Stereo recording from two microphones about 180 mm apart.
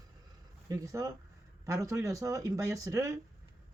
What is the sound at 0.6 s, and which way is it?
Speech, 15° right (ahead or behind).